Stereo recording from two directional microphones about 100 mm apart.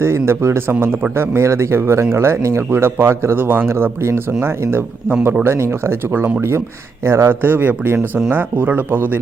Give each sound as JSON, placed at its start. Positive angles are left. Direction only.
{"t": 0.0, "sound": "speech", "side_deg": -25}